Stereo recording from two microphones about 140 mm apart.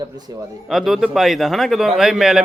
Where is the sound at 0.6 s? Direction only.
Centre (ahead or behind).